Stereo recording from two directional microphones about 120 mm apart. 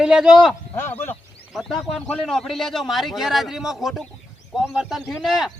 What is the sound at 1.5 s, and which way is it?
A man's voice, centre (ahead or behind).